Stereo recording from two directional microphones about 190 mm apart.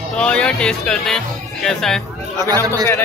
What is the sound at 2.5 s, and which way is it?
Speech, 20° right (ahead or behind).